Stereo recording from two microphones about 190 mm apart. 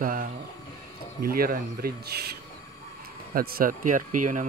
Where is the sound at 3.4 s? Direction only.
50° right (ahead or behind).